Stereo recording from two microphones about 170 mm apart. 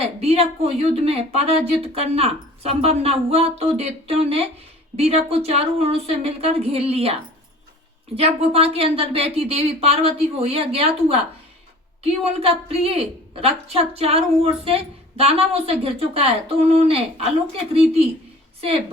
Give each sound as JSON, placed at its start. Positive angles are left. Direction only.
{"t": 0.0, "sound": "a woman's voice", "side_deg": -35}